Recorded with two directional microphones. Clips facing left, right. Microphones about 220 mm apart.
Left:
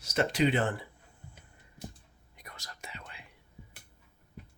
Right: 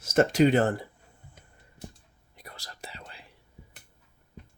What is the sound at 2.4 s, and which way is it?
Whispering, 30° right (ahead or behind).